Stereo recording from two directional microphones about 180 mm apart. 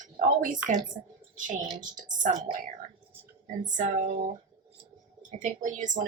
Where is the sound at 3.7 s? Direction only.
45° right (ahead or behind).